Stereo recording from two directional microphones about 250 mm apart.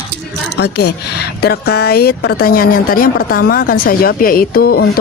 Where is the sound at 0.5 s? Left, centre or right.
Left.